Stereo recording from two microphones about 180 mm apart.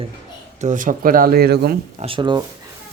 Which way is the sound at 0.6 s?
45° right (ahead or behind).